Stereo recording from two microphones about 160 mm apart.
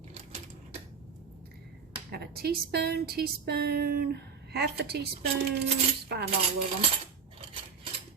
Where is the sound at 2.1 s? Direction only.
80° right.